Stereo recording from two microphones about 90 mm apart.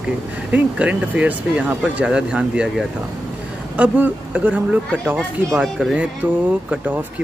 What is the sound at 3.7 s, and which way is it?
Speech, 15° right (ahead or behind).